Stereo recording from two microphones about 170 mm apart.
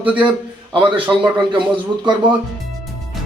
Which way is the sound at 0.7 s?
30° right (ahead or behind).